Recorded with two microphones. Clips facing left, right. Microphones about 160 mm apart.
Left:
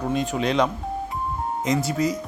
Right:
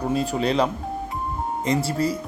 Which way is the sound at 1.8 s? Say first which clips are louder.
Even; 30° right (ahead or behind).